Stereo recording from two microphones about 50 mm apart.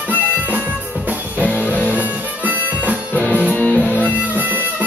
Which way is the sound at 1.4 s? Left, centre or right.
Left.